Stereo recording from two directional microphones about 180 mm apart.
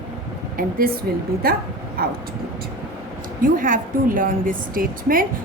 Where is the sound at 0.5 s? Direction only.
55° right (ahead or behind).